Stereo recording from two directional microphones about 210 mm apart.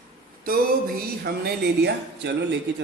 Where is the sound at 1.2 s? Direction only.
50° right (ahead or behind).